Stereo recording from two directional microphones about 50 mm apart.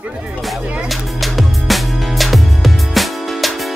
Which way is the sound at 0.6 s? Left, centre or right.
Right.